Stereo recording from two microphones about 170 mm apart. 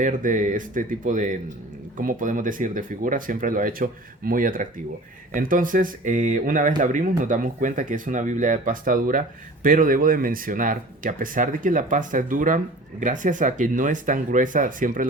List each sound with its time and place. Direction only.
0.0 s speech: 50° right (ahead or behind)